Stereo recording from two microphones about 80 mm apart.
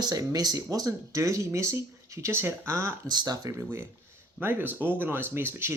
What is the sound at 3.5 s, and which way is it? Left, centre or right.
Speech, right.